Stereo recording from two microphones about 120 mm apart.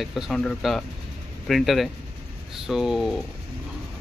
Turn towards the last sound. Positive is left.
turn(degrees=0)  # may be behind; listen again after turning